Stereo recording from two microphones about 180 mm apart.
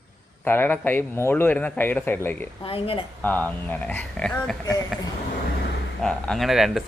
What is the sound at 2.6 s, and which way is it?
Speech, 30° left (ahead or behind).